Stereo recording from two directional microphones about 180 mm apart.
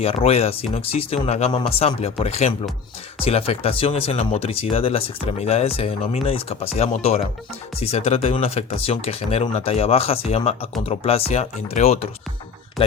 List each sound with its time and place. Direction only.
0.0 s speech: 35° left (ahead or behind)